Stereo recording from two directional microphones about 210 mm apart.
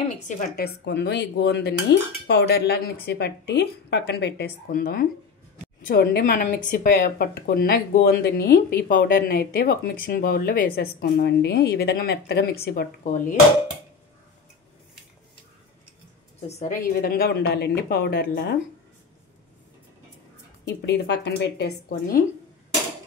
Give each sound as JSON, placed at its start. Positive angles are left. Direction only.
{"t": 0.4, "sound": "speech", "side_deg": 45}
{"t": 16.4, "sound": "a woman's voice", "side_deg": 30}
{"t": 17.0, "sound": "speech", "side_deg": 45}
{"t": 20.6, "sound": "speech", "side_deg": 50}